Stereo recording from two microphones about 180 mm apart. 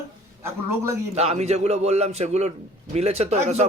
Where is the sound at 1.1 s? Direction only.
35° right (ahead or behind).